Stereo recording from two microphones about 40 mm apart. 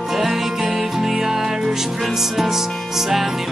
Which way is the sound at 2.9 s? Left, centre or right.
Centre.